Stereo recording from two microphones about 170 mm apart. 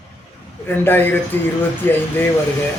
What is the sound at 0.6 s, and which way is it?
A man's voice, 10° left (ahead or behind).